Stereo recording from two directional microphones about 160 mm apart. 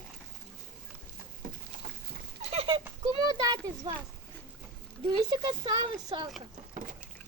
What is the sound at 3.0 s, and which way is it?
Speech, 25° right (ahead or behind).